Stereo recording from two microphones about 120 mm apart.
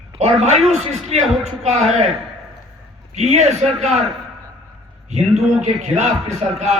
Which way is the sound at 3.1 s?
70° right (ahead or behind).